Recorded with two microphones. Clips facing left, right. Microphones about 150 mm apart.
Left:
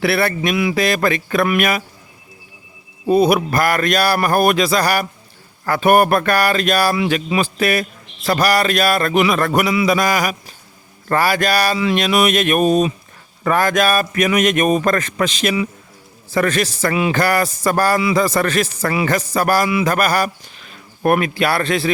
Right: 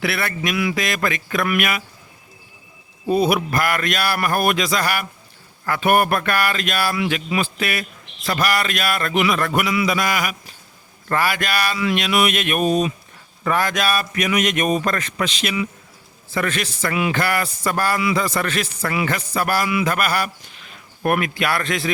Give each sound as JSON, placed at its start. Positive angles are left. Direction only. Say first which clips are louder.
{"t": 0.0, "sound": "a man's voice", "louder": "left 6 dB", "side_deg": 35}
{"t": 0.8, "sound": "a man's voice", "louder": "left 6 dB", "side_deg": 35}
{"t": 3.1, "sound": "a man's voice", "louder": "left 4 dB", "side_deg": 40}